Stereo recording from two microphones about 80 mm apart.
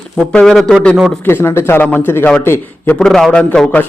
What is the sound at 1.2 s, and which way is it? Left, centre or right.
Speech, left.